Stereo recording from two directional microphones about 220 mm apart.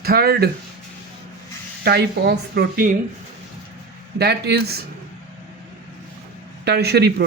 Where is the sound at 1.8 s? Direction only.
45° right (ahead or behind).